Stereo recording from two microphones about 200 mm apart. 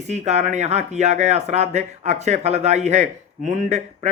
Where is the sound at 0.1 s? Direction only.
35° right (ahead or behind).